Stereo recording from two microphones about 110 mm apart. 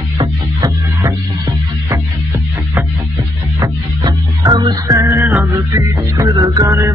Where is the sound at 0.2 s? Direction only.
30° right (ahead or behind).